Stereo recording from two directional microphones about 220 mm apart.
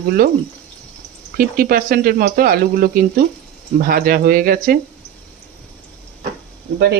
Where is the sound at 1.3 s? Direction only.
40° right (ahead or behind).